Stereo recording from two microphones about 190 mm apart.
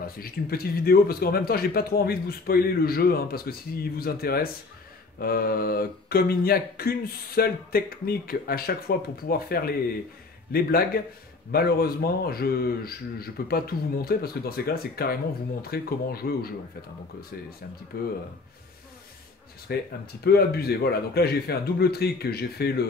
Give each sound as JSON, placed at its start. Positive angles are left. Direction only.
{"t": 0.0, "sound": "speech", "side_deg": 50}
{"t": 17.9, "sound": "a man's voice", "side_deg": 55}
{"t": 19.7, "sound": "a man's voice", "side_deg": 55}